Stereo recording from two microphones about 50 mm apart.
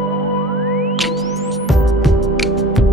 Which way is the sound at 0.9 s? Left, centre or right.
Centre.